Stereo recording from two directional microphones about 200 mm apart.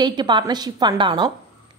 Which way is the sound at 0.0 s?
20° right (ahead or behind).